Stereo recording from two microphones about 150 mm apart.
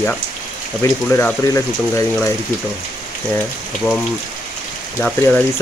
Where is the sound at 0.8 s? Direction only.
20° left (ahead or behind).